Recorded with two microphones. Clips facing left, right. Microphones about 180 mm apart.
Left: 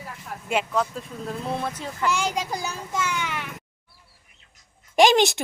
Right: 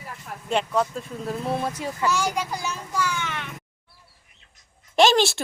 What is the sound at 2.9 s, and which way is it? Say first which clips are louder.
Speech: even; 20° left (ahead or behind).